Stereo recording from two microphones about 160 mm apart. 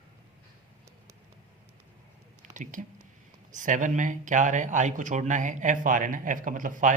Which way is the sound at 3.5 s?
50° right (ahead or behind).